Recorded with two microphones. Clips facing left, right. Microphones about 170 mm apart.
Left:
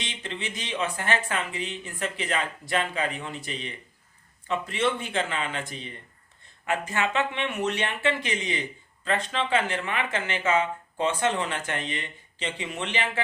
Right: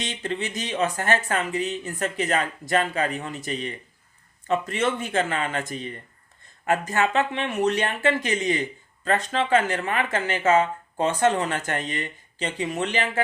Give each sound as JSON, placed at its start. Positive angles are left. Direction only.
{"t": 0.0, "sound": "speech", "side_deg": -45}